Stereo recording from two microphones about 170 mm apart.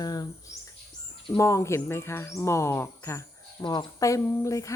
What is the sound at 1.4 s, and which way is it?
Speech, 15° left (ahead or behind).